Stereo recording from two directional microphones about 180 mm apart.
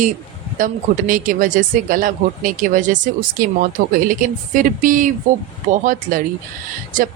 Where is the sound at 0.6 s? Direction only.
50° right (ahead or behind).